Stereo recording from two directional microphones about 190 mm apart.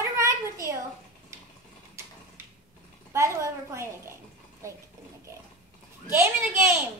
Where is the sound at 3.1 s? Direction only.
15° right (ahead or behind).